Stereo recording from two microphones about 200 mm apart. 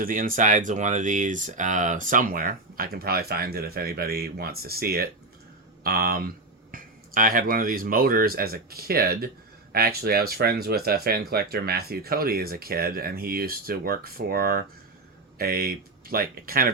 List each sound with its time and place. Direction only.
0.0 s speech: 45° right (ahead or behind)